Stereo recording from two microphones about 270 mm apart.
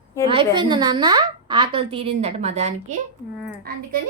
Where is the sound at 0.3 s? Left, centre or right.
Centre; by 3.8 s right.